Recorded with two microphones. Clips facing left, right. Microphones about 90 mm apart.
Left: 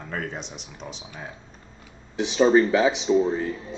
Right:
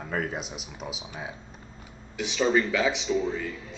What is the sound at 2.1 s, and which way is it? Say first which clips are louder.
Speech: left 6 dB; 35° left (ahead or behind).